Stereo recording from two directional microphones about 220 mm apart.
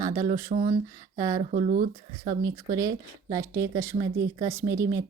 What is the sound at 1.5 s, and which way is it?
Speech, 35° right (ahead or behind).